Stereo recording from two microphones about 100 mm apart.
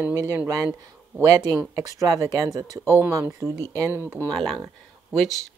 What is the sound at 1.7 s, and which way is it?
Speech, 35° right (ahead or behind).